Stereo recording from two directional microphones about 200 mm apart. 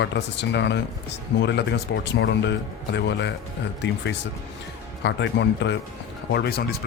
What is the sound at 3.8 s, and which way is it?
Speech, 60° left (ahead or behind).